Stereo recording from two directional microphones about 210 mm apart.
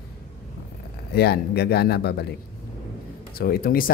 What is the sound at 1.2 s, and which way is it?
Speech, 50° left (ahead or behind).